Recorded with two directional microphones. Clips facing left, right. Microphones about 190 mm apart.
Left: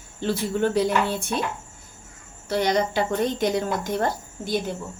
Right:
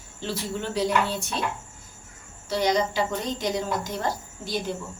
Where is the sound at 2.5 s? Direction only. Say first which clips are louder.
Left 2 dB; 55° left (ahead or behind).